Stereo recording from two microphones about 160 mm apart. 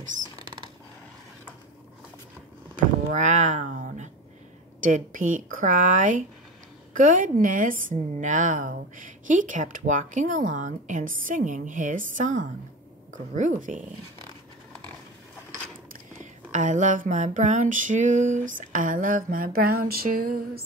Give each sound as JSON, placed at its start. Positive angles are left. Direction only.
{"t": 2.7, "sound": "a sound", "side_deg": -50}
{"t": 4.7, "sound": "a woman's voice", "side_deg": -55}
{"t": 15.9, "sound": "a woman's voice", "side_deg": -50}